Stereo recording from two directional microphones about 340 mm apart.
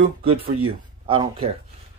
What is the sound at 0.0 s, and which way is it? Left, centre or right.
Speech, centre.